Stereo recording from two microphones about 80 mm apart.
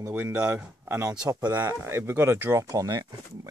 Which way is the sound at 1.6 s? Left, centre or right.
Right.